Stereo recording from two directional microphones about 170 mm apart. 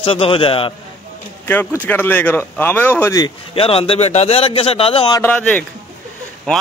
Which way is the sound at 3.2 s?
35° left (ahead or behind).